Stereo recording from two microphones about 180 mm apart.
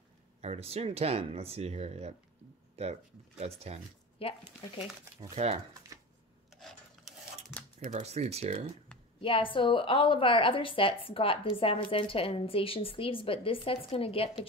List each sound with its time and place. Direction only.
0.4 s speech: 35° right (ahead or behind)
4.2 s speech: 30° left (ahead or behind)
5.3 s speech: 35° right (ahead or behind)
6.6 s filing: centre (ahead or behind)
7.8 s speech: 35° right (ahead or behind)
9.2 s a woman's voice: 30° left (ahead or behind)